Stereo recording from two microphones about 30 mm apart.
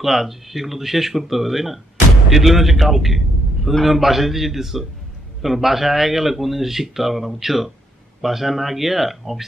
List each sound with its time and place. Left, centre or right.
0.0 s speech: centre